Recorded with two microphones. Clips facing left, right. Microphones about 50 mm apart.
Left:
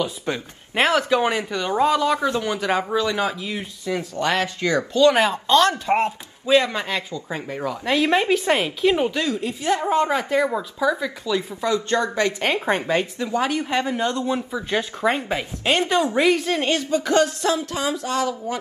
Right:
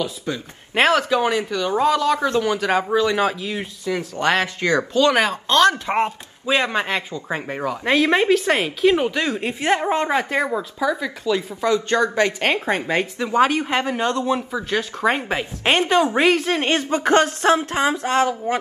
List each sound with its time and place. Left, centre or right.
0.3 s speech: left
1.8 s speech: centre
2.5 s speech: right
9.2 s speech: right
15.6 s speech: right